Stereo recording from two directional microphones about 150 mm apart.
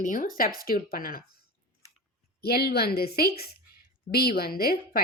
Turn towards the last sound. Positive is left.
turn(degrees=90)